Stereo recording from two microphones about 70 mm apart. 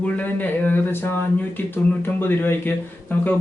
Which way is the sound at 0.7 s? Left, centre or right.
Left.